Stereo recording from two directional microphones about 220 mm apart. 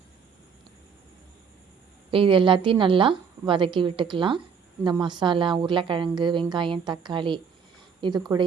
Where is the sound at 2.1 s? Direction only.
25° right (ahead or behind).